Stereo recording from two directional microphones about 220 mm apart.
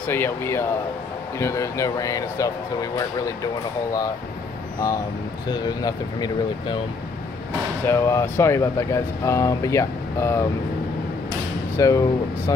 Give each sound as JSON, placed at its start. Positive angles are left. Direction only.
{"t": 0.1, "sound": "speech", "side_deg": 10}
{"t": 4.7, "sound": "speech", "side_deg": 15}
{"t": 7.8, "sound": "speech", "side_deg": 10}
{"t": 11.7, "sound": "speech", "side_deg": 15}